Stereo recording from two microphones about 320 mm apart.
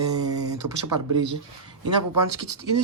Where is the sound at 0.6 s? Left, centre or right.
Right.